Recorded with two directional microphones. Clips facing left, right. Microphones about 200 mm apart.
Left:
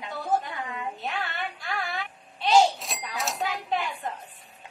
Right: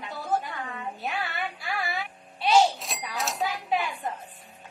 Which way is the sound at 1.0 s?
10° right (ahead or behind).